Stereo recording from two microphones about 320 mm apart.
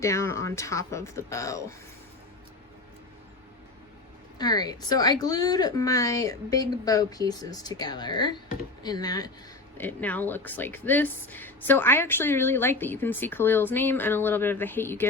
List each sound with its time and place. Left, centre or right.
0.0 s speech: centre
4.4 s speech: centre